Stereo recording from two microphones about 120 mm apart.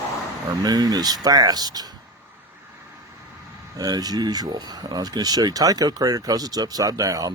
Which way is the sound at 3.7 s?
35° right (ahead or behind).